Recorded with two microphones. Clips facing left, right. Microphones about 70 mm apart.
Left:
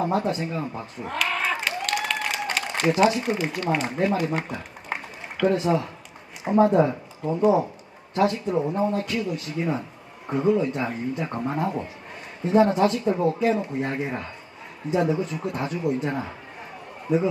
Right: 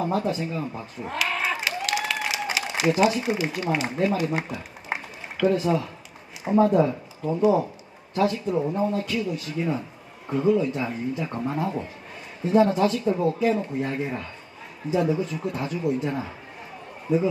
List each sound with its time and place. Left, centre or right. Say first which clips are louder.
0.0 s speech: left 1 dB; centre
0.7 s a sound: left 1 dB; centre
3.6 s speech: even; centre
4.9 s a sound: right 1 dB; centre
5.4 s speech: even; centre
7.3 s a man's voice: left 1 dB; centre